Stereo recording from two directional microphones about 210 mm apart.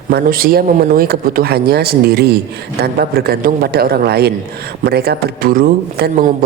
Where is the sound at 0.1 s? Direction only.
45° right (ahead or behind).